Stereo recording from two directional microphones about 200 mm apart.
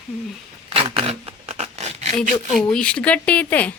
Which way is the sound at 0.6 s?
30° right (ahead or behind).